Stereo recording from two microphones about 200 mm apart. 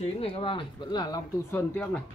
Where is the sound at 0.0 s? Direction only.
30° left (ahead or behind); by 1.9 s 10° left (ahead or behind).